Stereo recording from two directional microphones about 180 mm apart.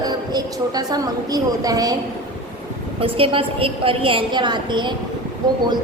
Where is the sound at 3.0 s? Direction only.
30° right (ahead or behind).